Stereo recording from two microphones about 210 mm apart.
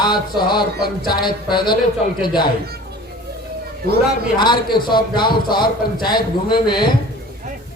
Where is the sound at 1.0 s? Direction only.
20° left (ahead or behind).